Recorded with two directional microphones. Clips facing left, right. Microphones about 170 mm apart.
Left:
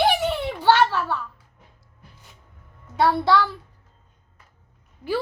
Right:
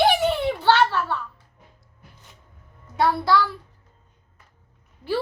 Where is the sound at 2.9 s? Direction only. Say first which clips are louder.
Left 1 dB; 25° left (ahead or behind).